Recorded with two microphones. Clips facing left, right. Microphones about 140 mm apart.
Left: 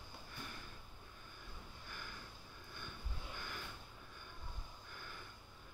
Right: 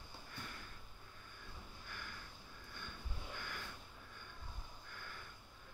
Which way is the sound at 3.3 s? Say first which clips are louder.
Even; 20° left (ahead or behind).